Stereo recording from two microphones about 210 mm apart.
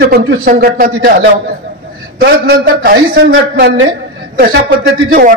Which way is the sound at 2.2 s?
45° right (ahead or behind).